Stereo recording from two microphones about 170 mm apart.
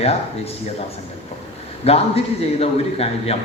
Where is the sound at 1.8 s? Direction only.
35° left (ahead or behind).